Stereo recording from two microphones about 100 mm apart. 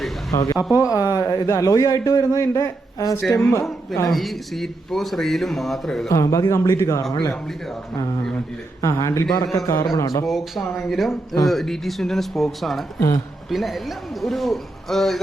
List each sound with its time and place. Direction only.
0.3 s a man's voice: 35° left (ahead or behind)
0.7 s speech: 15° right (ahead or behind)
0.9 s a man's voice: 35° left (ahead or behind)
3.2 s speech: 5° left (ahead or behind)
6.1 s a man's voice: 30° left (ahead or behind)
8.8 s a man's voice: 30° left (ahead or behind)
10.2 s speech: centre (ahead or behind)
13.0 s a man's voice: 35° left (ahead or behind)
13.5 s speech: centre (ahead or behind)